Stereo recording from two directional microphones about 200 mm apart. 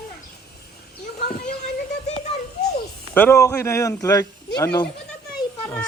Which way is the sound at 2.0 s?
35° left (ahead or behind).